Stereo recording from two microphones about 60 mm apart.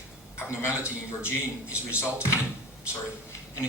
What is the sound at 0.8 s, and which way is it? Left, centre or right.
Speech, left.